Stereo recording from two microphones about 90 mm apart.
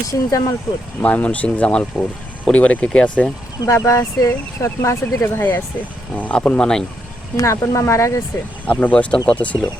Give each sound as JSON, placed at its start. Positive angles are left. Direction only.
{"t": 0.1, "sound": "speech", "side_deg": 40}
{"t": 1.0, "sound": "speech", "side_deg": 15}
{"t": 3.7, "sound": "speech", "side_deg": 35}
{"t": 7.3, "sound": "speech", "side_deg": 35}
{"t": 8.6, "sound": "speech", "side_deg": 15}